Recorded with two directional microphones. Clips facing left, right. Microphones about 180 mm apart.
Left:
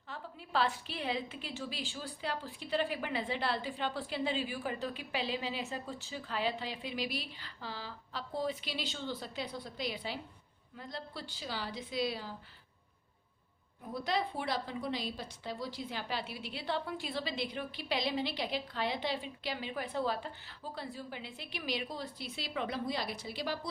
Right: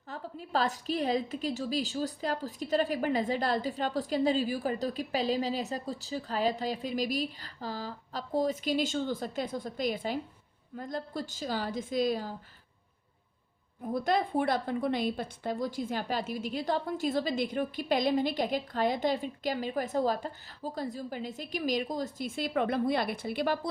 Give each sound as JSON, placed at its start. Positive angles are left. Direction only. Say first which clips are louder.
{"t": 0.1, "sound": "a woman's voice", "louder": "right 4 dB", "side_deg": -40}
{"t": 13.9, "sound": "a woman's voice", "louder": "right 7 dB", "side_deg": -50}